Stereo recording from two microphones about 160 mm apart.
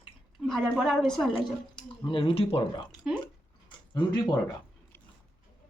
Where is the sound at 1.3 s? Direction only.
30° left (ahead or behind).